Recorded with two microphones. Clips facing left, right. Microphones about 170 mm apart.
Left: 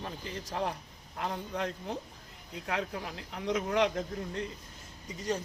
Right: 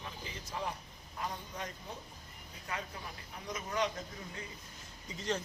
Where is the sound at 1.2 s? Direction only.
70° left (ahead or behind).